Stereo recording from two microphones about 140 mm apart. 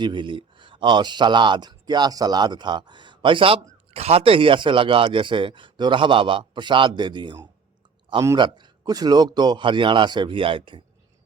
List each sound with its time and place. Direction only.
0.0 s speech: 35° right (ahead or behind)